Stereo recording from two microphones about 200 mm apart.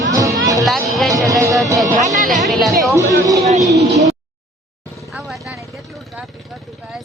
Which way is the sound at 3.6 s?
15° right (ahead or behind).